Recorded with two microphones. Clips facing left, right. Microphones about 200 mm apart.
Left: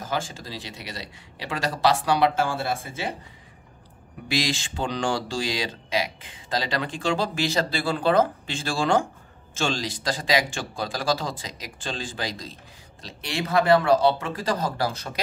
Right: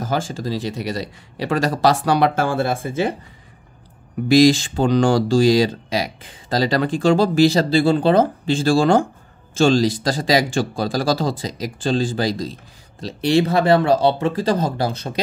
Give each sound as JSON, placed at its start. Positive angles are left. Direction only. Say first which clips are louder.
{"t": 0.0, "sound": "speech", "louder": "right 7 dB", "side_deg": -40}
{"t": 4.3, "sound": "speech", "louder": "right 14 dB", "side_deg": -40}